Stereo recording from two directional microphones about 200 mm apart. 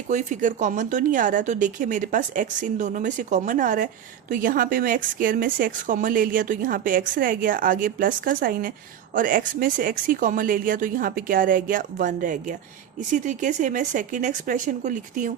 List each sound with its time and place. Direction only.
0.1 s a woman's voice: 40° right (ahead or behind)